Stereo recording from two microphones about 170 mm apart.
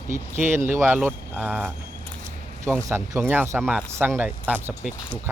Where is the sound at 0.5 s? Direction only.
15° right (ahead or behind).